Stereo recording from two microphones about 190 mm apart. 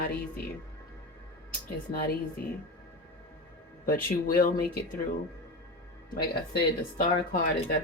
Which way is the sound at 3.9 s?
50° left (ahead or behind).